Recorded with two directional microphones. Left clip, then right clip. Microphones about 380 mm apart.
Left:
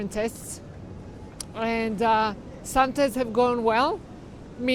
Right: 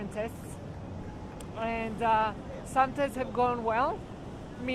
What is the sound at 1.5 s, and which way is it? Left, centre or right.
Speech, left.